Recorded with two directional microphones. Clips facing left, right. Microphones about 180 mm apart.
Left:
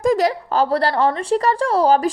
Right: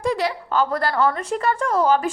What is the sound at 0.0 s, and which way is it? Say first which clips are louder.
Speech: left 6 dB; 45° left (ahead or behind).